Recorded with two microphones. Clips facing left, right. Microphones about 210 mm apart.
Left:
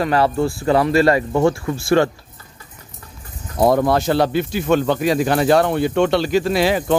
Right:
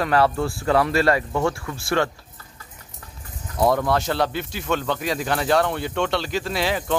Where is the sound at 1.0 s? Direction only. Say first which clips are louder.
Left 5 dB; 25° left (ahead or behind).